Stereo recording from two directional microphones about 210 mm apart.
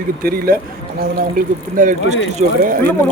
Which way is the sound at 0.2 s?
45° right (ahead or behind).